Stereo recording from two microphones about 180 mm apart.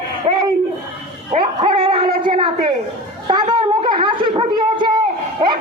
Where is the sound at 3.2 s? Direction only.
25° right (ahead or behind).